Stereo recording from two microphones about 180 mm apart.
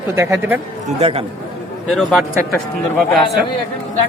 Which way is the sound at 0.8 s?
35° right (ahead or behind).